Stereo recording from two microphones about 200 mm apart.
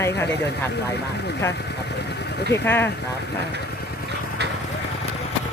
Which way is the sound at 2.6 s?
10° left (ahead or behind).